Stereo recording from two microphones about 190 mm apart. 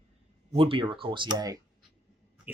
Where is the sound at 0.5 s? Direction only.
30° right (ahead or behind).